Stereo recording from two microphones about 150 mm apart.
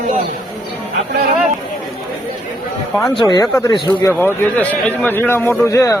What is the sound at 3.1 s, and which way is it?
Speech, 30° left (ahead or behind).